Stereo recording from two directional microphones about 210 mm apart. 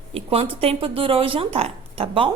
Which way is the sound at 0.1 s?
30° right (ahead or behind).